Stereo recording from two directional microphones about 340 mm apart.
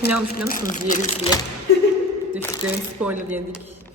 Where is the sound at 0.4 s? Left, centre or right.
Left.